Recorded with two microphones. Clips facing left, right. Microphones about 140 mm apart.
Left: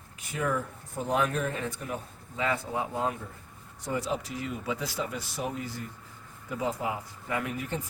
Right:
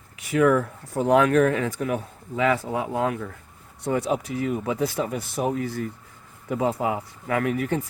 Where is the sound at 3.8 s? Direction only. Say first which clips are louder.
Right 7 dB; 65° right (ahead or behind).